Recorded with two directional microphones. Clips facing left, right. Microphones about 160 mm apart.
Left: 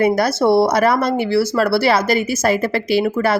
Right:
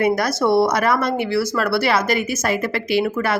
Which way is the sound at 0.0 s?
30° left (ahead or behind).